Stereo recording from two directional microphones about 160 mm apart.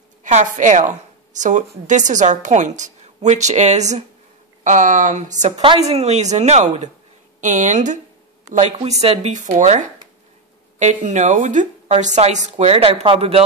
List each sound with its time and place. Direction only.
0.2 s a woman's voice: 50° right (ahead or behind)
5.6 s a woman's voice: 40° right (ahead or behind)